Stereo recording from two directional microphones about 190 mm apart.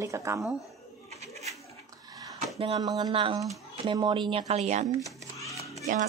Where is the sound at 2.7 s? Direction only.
20° right (ahead or behind); by 4.9 s 35° right (ahead or behind).